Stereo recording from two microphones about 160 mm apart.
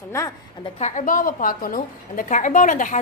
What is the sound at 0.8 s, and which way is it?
A woman's voice, 50° left (ahead or behind).